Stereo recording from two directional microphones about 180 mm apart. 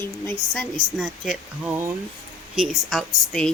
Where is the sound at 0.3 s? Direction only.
5° left (ahead or behind).